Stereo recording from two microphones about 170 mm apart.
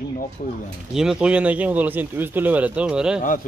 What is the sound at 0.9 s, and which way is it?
Speech, 5° right (ahead or behind).